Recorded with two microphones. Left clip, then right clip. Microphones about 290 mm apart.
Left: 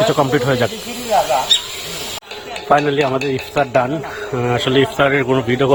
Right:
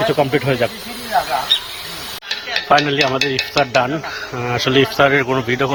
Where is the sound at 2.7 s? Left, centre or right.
Centre.